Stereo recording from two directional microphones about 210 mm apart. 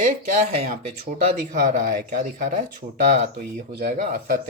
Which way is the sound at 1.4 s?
40° right (ahead or behind).